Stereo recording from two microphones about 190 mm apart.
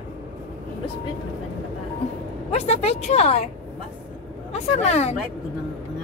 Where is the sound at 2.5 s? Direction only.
35° left (ahead or behind).